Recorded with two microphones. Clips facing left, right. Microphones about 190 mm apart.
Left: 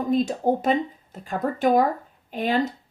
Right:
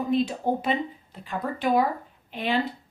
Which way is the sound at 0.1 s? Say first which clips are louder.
Left 3 dB; 45° left (ahead or behind).